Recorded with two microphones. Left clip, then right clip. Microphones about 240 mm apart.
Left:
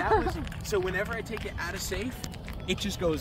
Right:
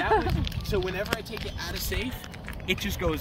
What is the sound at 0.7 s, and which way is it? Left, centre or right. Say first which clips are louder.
Speech: left 1 dB; centre.